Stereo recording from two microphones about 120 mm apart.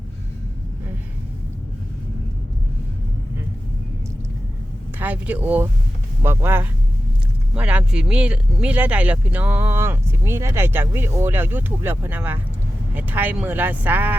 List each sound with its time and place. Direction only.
4.9 s speech: 15° right (ahead or behind)